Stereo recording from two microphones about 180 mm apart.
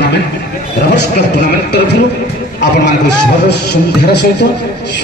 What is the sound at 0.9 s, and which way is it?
A man's voice, 70° left (ahead or behind).